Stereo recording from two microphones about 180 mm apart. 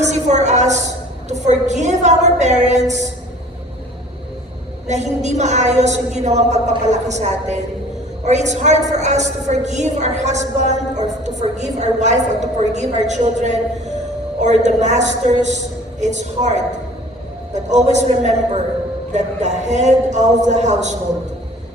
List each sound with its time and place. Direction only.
0.0 s a sound: 40° right (ahead or behind)
1.3 s a woman's voice: 40° right (ahead or behind)
4.9 s a woman's voice: 40° right (ahead or behind)